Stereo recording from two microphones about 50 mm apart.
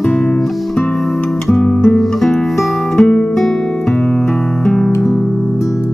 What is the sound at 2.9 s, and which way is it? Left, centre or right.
Music, centre.